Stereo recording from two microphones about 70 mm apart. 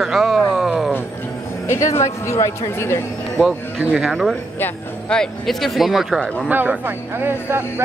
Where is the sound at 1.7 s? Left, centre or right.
Left.